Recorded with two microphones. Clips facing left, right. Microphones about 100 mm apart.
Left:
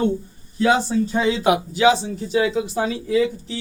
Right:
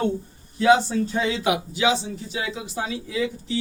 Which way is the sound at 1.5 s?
45° left (ahead or behind).